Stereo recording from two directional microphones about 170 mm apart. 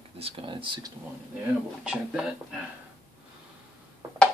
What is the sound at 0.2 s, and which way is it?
Speech, 30° right (ahead or behind).